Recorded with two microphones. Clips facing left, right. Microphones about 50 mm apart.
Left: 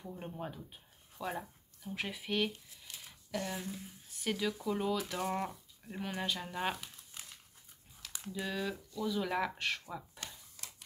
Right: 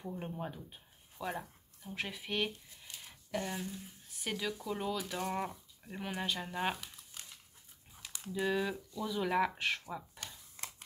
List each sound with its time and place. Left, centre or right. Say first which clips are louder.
0.1 s speech: right 1 dB; centre
8.3 s speech: right 4 dB; centre
10.6 s scissors: right 6 dB; right